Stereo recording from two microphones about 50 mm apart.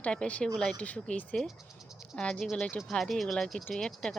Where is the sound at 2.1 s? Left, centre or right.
Centre.